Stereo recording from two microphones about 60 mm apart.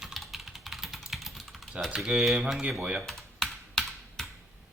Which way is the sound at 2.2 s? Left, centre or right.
Centre.